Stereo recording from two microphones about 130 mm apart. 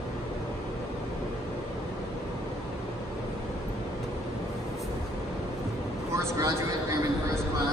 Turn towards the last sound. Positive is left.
turn(degrees=-20)  # may be behind; listen again after turning